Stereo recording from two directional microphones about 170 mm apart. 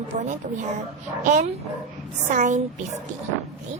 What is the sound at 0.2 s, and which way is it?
A woman's voice, 45° right (ahead or behind).